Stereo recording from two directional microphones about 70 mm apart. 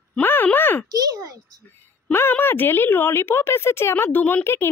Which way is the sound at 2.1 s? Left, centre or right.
Left.